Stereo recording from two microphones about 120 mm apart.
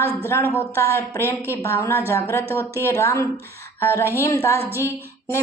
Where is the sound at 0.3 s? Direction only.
20° left (ahead or behind).